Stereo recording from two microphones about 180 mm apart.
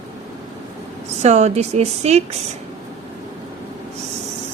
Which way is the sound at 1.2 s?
40° right (ahead or behind).